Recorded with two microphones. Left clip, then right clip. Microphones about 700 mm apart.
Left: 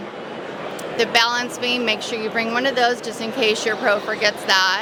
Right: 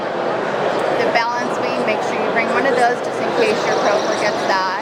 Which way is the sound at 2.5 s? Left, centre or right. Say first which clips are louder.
Right 2 dB; left.